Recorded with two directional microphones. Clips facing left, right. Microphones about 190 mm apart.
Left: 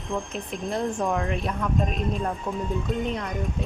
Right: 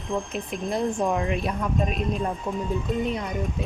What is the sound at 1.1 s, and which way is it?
Speech, 15° right (ahead or behind).